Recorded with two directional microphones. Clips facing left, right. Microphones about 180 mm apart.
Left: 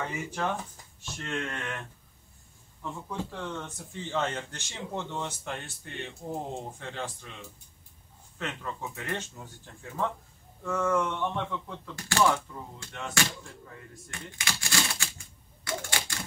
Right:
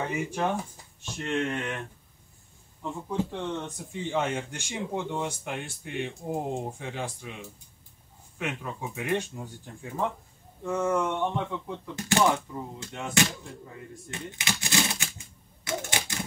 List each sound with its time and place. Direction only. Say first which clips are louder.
0.3 s speech: right 3 dB; 15° right (ahead or behind)
2.8 s speech: right 5 dB; 25° right (ahead or behind)
14.1 s typewriter: right 4 dB; 20° right (ahead or behind)